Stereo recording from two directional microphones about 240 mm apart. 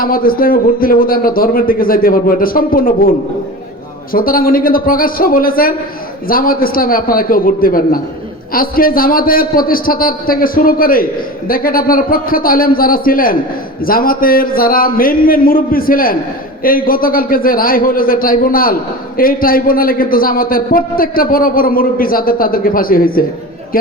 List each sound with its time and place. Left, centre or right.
0.0 s a man's voice: left
4.1 s a man's voice: left